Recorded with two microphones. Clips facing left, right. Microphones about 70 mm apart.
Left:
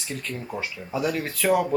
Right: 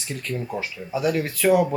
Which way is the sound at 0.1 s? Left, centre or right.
Centre.